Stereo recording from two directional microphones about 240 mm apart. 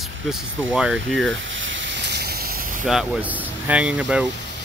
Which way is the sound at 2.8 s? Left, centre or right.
Centre.